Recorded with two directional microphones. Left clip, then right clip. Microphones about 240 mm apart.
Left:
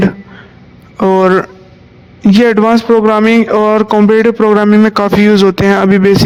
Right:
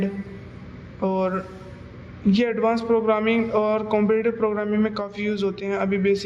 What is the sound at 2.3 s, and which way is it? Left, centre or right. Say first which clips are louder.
A man's voice: left 13 dB; left.